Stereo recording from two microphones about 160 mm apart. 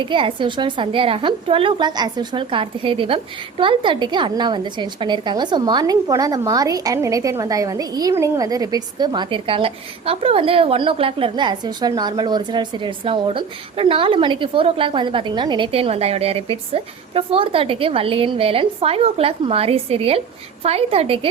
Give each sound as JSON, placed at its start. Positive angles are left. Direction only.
{"t": 0.0, "sound": "a woman's voice", "side_deg": -30}